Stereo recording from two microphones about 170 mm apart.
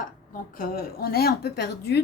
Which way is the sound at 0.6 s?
60° left (ahead or behind).